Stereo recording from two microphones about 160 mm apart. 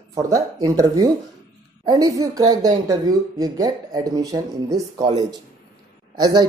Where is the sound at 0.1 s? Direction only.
20° right (ahead or behind).